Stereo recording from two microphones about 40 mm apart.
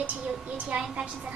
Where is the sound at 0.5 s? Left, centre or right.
Right.